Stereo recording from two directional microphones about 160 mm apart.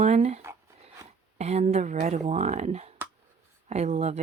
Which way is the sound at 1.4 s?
45° right (ahead or behind).